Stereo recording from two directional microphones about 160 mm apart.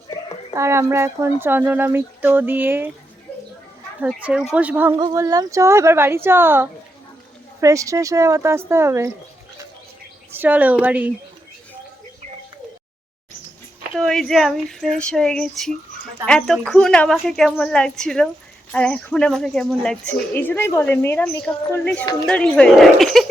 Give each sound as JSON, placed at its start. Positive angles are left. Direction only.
{"t": 0.5, "sound": "speech", "side_deg": -15}
{"t": 4.1, "sound": "a woman's voice", "side_deg": -5}
{"t": 10.3, "sound": "speech", "side_deg": -10}
{"t": 13.9, "sound": "speech", "side_deg": 5}